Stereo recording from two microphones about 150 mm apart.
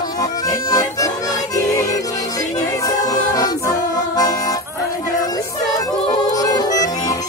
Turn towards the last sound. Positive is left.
turn(degrees=25)  # may be behind; listen again after turning